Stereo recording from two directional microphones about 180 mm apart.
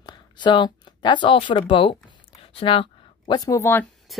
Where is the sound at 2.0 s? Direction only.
30° left (ahead or behind).